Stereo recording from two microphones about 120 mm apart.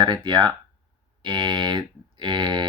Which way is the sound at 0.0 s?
40° right (ahead or behind).